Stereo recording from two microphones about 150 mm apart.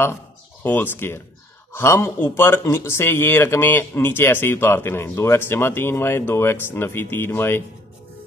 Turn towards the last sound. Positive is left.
turn(degrees=15)  # may be behind; listen again after turning